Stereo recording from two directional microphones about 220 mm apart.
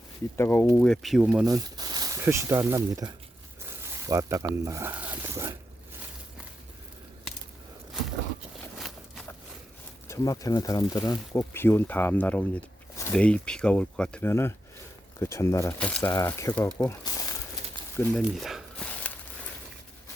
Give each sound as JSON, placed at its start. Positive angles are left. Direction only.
{"t": 0.3, "sound": "speech", "side_deg": 10}
{"t": 1.5, "sound": "speech", "side_deg": -15}
{"t": 10.1, "sound": "speech", "side_deg": 15}
{"t": 18.1, "sound": "a sound", "side_deg": 0}